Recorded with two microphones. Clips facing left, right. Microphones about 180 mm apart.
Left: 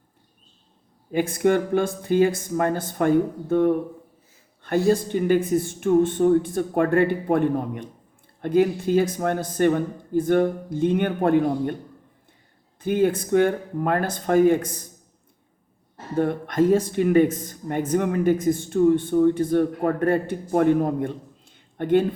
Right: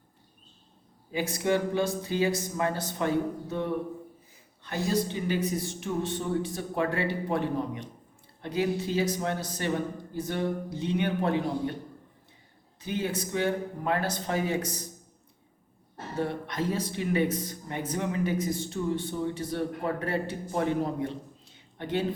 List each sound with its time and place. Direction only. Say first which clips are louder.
1.1 s speech: left 7 dB; 55° left (ahead or behind)
12.8 s speech: left 10 dB; 50° left (ahead or behind)
16.1 s speech: left 9 dB; 50° left (ahead or behind)